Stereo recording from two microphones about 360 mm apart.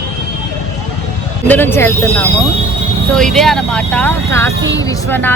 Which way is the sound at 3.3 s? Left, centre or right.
Centre.